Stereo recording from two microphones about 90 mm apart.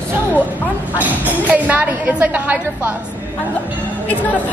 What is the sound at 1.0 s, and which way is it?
A woman's voice, 20° right (ahead or behind).